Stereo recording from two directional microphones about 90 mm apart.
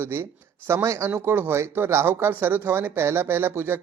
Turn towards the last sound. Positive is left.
turn(degrees=-25)  # may be behind; listen again after turning